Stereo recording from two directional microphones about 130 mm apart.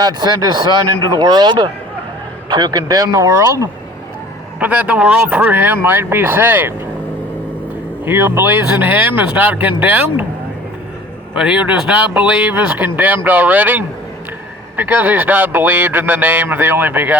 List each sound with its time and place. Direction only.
0.0 s speech: 30° right (ahead or behind)
4.6 s speech: 10° right (ahead or behind)
8.0 s speech: 15° right (ahead or behind)
11.3 s speech: 5° right (ahead or behind)